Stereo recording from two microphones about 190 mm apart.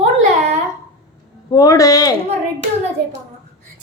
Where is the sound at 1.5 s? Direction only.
20° left (ahead or behind).